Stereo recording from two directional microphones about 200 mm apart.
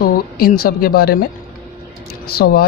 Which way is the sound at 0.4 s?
50° left (ahead or behind).